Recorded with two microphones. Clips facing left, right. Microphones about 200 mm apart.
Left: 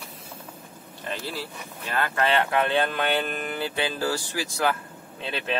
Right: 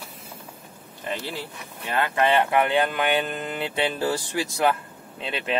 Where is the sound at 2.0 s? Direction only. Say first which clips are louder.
Right 3 dB; 20° right (ahead or behind).